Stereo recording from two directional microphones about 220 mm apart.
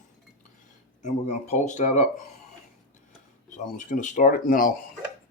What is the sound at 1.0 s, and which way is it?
Speech, 35° left (ahead or behind).